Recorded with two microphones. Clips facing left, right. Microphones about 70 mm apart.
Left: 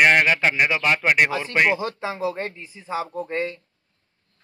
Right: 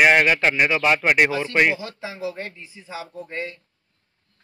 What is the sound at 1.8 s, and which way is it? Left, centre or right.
A man's voice, left.